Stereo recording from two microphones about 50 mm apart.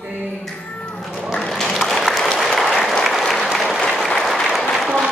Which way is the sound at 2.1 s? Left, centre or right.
Centre.